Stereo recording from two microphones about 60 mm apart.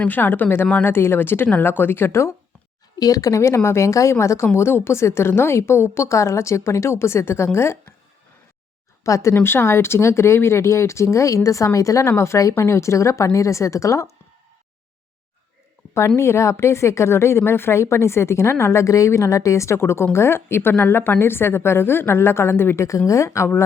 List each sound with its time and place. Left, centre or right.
0.0 s a woman's voice: left
3.0 s a woman's voice: left
9.0 s speech: left
9.4 s a woman's voice: left
16.0 s a woman's voice: left